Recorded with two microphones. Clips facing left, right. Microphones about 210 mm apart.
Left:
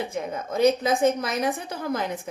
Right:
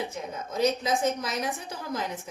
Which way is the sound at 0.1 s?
60° left (ahead or behind).